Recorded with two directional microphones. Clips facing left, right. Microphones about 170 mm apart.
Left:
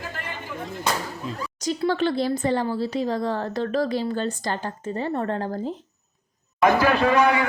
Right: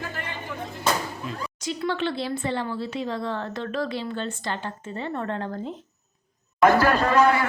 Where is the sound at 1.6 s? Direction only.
40° left (ahead or behind).